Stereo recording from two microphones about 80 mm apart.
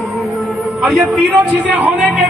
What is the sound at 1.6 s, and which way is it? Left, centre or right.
Speech, centre.